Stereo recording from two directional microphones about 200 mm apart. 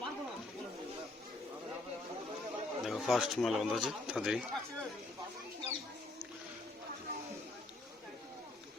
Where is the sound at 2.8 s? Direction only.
Centre (ahead or behind).